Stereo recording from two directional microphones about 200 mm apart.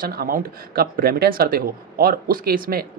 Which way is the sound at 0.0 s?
45° right (ahead or behind).